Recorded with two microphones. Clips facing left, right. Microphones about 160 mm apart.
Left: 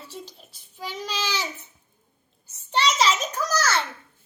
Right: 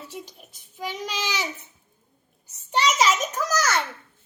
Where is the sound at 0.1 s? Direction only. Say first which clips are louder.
Right 1 dB; 15° right (ahead or behind).